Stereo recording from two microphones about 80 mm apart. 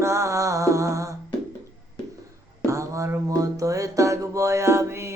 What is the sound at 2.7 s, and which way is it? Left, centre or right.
Music, right.